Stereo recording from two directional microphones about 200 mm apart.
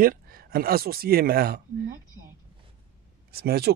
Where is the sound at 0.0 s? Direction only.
45° right (ahead or behind).